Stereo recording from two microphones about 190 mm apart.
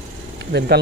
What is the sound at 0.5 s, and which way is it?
Speech, 60° right (ahead or behind).